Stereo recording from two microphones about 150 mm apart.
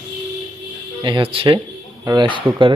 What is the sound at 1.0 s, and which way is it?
Speech, 30° right (ahead or behind).